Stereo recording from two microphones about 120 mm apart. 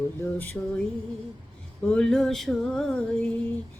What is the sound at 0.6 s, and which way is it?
Music, 15° left (ahead or behind).